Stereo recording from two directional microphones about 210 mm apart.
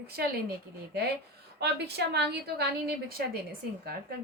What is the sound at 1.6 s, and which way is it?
A woman's voice, 50° right (ahead or behind).